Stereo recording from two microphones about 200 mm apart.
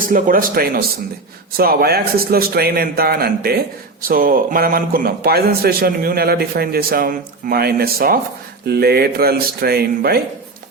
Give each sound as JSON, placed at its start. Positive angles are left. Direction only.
{"t": 0.0, "sound": "a man's voice", "side_deg": -45}